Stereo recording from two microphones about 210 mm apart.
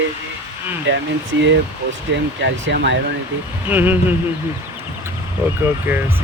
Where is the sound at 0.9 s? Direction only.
60° right (ahead or behind).